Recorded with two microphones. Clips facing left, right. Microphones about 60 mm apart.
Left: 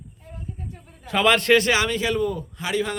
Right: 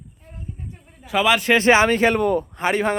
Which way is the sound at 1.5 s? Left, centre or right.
Right.